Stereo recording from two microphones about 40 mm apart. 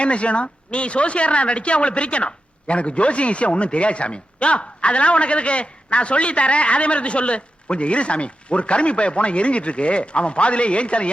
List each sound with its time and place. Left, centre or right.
0.0 s a woman's voice: left